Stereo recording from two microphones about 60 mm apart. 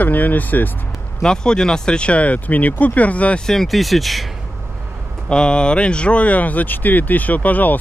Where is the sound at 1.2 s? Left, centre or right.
Centre.